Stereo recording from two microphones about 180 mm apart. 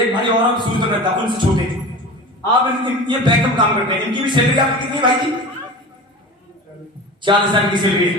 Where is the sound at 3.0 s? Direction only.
25° right (ahead or behind).